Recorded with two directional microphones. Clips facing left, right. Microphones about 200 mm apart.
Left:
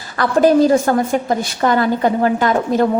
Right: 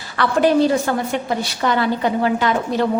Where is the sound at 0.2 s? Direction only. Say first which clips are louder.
Left 3 dB; 40° left (ahead or behind).